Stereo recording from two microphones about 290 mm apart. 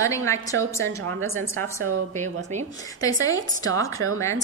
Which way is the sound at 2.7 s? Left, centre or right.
Centre.